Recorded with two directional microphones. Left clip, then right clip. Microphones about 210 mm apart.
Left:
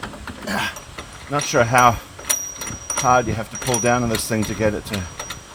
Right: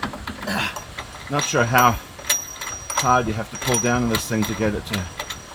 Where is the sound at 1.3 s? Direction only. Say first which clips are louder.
Left 2 dB; 40° left (ahead or behind).